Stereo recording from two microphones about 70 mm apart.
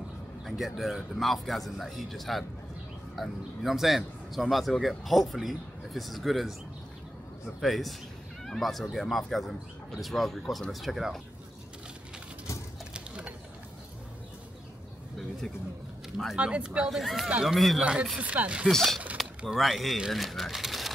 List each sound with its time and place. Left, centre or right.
0.5 s a man's voice: centre
12.9 s a sound: centre
16.3 s speech: centre
17.6 s a man's voice: centre
18.1 s speech: right
18.7 s a man's voice: centre